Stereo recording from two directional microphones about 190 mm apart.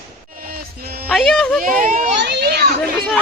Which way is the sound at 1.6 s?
45° right (ahead or behind).